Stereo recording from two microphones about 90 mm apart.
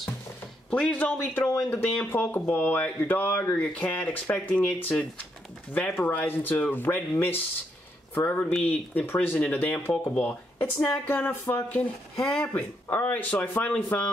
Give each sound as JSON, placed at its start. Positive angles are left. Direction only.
{"t": 0.7, "sound": "speech", "side_deg": 10}
{"t": 12.2, "sound": "speech", "side_deg": 10}
{"t": 12.5, "sound": "speech", "side_deg": 25}